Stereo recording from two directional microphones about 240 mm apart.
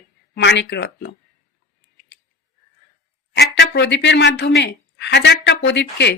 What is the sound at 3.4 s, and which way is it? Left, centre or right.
Speech, left.